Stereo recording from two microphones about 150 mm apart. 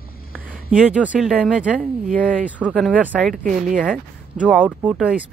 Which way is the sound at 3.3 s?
60° right (ahead or behind).